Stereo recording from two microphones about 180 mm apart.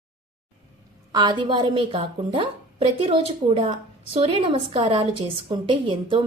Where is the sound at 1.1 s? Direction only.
25° right (ahead or behind).